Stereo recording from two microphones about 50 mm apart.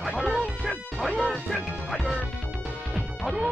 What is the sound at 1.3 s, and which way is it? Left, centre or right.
Speech, centre.